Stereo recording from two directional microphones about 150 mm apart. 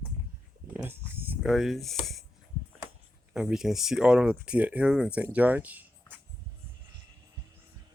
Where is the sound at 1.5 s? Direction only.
Centre (ahead or behind).